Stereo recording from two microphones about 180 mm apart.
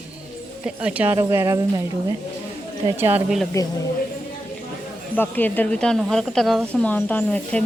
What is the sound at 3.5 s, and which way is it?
Speech, 15° left (ahead or behind).